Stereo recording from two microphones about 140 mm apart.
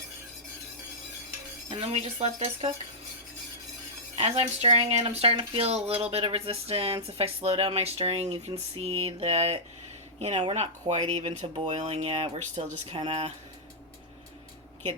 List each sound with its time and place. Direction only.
1.7 s speech: 50° right (ahead or behind)
4.2 s speech: 45° right (ahead or behind)